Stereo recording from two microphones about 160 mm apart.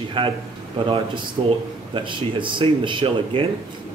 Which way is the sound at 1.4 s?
35° right (ahead or behind).